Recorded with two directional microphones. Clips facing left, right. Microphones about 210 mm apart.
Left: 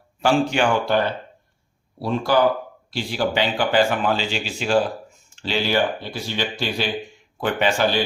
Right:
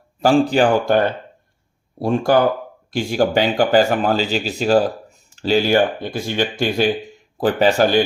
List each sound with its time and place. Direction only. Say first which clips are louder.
0.2 s speech: right 5 dB; 40° right (ahead or behind)